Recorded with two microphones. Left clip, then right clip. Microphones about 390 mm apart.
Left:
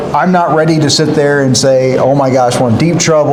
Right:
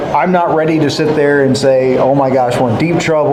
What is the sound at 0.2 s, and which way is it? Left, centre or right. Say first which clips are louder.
Speech: left 2 dB; left.